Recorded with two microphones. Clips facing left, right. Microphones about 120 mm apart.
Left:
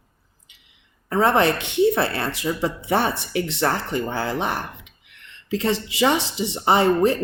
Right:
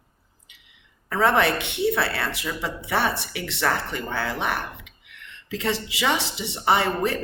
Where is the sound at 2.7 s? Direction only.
40° left (ahead or behind).